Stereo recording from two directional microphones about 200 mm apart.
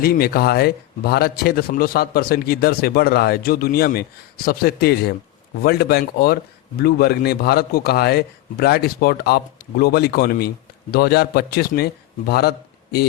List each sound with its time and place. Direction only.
0.0 s a man's voice: 50° left (ahead or behind)